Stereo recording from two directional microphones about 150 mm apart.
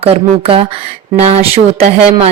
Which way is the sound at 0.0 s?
40° right (ahead or behind).